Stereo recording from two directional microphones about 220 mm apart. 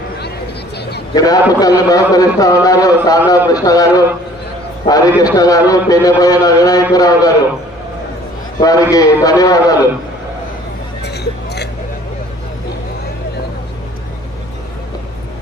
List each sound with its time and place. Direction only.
1.1 s a man's voice: 15° left (ahead or behind)
8.6 s a man's voice: 15° left (ahead or behind)
11.0 s music: 50° left (ahead or behind)